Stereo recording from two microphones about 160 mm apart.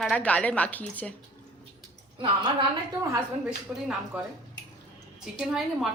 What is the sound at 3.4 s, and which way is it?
A woman's voice, 5° right (ahead or behind).